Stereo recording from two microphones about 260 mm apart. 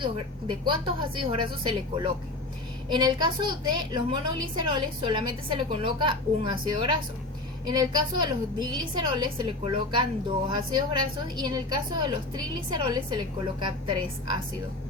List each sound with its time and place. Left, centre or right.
0.0 s a woman's voice: centre